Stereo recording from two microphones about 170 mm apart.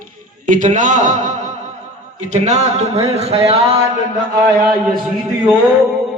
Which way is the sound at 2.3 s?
45° right (ahead or behind).